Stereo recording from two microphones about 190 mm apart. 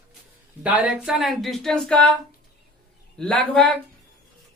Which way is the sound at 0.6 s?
5° right (ahead or behind).